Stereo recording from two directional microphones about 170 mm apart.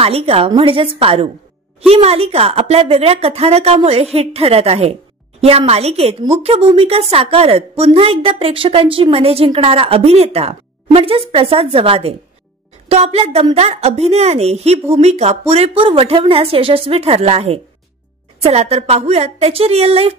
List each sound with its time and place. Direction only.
0.0 s speech: 35° right (ahead or behind)